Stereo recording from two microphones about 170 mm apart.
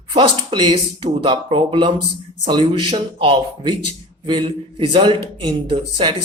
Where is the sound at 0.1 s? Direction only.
30° right (ahead or behind).